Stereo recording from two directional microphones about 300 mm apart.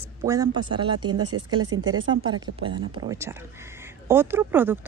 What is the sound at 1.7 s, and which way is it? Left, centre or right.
Speech, right.